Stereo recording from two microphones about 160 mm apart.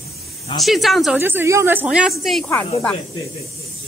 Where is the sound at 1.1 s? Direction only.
15° right (ahead or behind).